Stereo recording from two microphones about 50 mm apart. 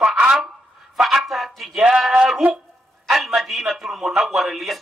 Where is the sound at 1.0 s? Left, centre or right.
Centre.